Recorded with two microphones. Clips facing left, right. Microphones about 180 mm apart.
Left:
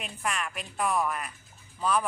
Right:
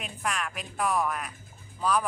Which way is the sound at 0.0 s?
Centre (ahead or behind).